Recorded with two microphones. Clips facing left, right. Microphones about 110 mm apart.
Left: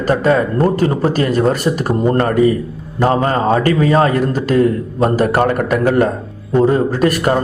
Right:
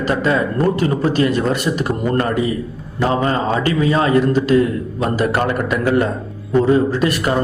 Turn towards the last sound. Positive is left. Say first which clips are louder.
# left 3 dB
turn(degrees=45)  # may be behind; listen again after turning